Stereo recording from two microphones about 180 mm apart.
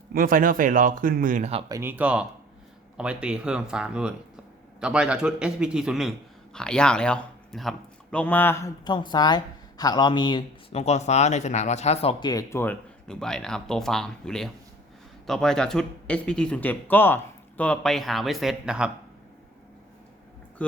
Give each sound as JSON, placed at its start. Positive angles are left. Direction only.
{"t": 0.1, "sound": "speech", "side_deg": -50}
{"t": 1.7, "sound": "a man's voice", "side_deg": -10}
{"t": 12.2, "sound": "speech", "side_deg": 20}
{"t": 20.6, "sound": "speech", "side_deg": 5}